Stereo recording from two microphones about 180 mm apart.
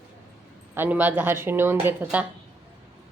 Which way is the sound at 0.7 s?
10° right (ahead or behind).